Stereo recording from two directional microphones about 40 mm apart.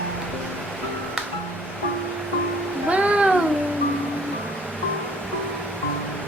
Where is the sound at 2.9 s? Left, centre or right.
Right.